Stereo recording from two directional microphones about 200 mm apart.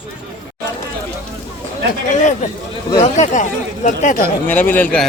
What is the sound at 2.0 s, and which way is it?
Speech, 40° left (ahead or behind).